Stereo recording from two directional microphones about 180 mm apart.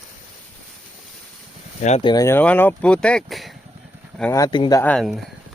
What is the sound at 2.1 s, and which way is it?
Speech, 15° left (ahead or behind).